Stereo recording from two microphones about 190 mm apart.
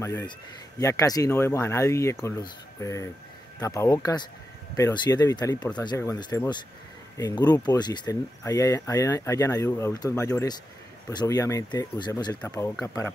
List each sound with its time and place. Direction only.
0.0 s speech: 15° left (ahead or behind)